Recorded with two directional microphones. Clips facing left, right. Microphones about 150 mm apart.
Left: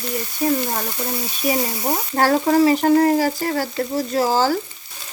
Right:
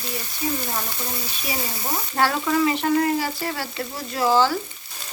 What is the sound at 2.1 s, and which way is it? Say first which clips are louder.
Speech: left 5 dB; 40° left (ahead or behind).